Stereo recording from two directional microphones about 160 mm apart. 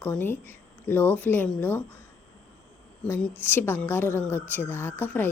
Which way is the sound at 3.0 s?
10° left (ahead or behind).